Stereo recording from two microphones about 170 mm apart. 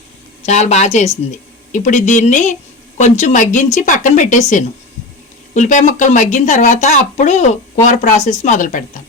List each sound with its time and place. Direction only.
0.4 s speech: 45° left (ahead or behind)